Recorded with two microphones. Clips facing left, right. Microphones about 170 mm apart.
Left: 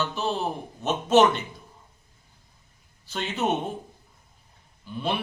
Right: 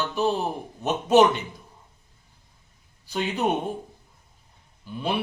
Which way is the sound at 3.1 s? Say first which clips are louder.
Right 2 dB; 15° right (ahead or behind).